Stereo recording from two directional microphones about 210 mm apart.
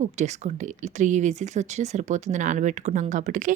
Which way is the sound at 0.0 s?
35° right (ahead or behind).